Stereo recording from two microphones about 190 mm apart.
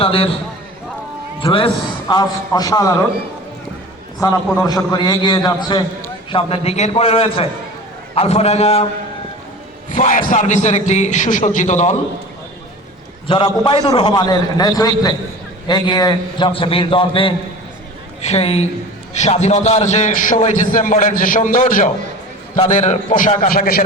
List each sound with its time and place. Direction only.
0.0 s a man's voice: 30° left (ahead or behind)
1.4 s a man's voice: 25° left (ahead or behind)
4.5 s a man's voice: 15° left (ahead or behind); by 8.9 s 35° left (ahead or behind)
9.9 s a man's voice: 45° left (ahead or behind)
13.2 s a man's voice: 25° left (ahead or behind); by 23.8 s 50° left (ahead or behind)